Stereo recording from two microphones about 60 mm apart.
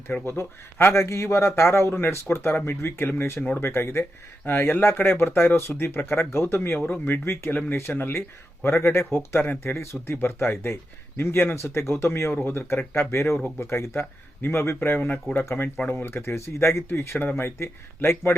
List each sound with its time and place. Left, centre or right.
0.3 s a man's voice: left
1.9 s a man's voice: left
9.7 s a man's voice: left
15.0 s speech: left
15.4 s a man's voice: left